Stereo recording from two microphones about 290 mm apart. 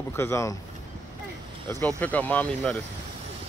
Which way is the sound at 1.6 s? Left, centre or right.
Centre.